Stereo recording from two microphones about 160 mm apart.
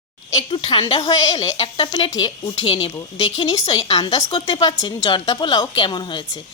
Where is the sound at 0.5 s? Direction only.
35° left (ahead or behind).